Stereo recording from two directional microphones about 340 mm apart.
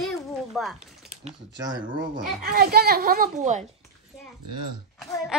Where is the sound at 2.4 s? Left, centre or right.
Right.